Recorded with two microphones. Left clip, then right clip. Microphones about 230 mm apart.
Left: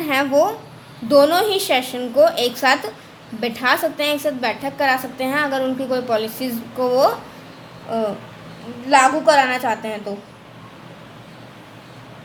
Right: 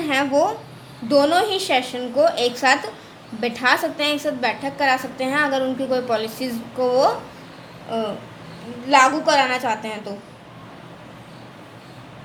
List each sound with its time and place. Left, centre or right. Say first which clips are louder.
0.0 s a woman's voice: left 2 dB; centre
8.9 s a woman's voice: left 2 dB; centre